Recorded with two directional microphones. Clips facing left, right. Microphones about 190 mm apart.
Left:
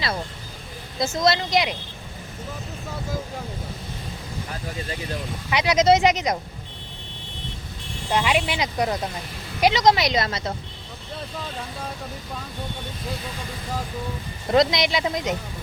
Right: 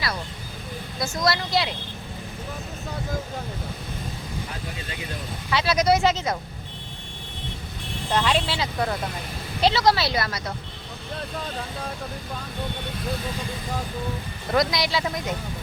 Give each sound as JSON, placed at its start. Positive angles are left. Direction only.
{"t": 0.9, "sound": "speech", "side_deg": 20}
{"t": 5.5, "sound": "speech", "side_deg": 15}
{"t": 8.1, "sound": "speech", "side_deg": 10}
{"t": 14.5, "sound": "speech", "side_deg": 25}